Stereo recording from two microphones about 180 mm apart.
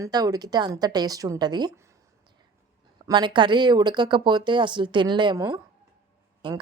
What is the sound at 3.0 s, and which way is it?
Speech, 25° right (ahead or behind).